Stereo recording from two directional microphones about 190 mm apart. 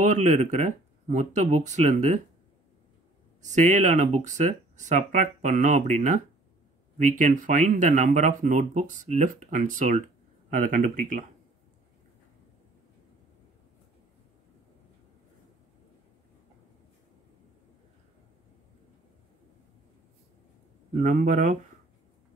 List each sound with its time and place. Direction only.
0.0 s speech: 40° right (ahead or behind)
3.4 s speech: 40° right (ahead or behind)
20.9 s speech: 40° right (ahead or behind)